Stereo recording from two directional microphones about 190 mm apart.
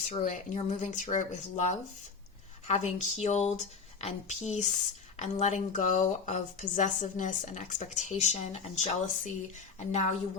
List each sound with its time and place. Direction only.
0.1 s speech: 40° left (ahead or behind)
2.6 s speech: 35° left (ahead or behind)